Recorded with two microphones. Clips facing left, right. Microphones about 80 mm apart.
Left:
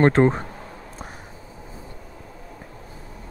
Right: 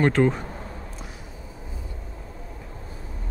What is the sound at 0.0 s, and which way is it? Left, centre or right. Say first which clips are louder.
Speech: left 3 dB; left.